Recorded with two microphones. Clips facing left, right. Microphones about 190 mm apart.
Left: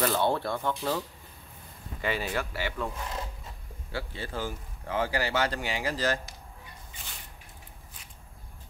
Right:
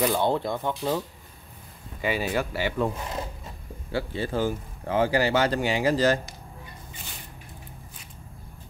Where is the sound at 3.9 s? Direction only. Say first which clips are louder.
Right 8 dB; 20° right (ahead or behind).